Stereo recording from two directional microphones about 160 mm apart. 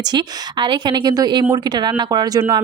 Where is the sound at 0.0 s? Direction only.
25° right (ahead or behind).